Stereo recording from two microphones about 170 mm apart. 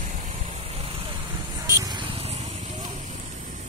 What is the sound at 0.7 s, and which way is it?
Vehicle, 35° right (ahead or behind).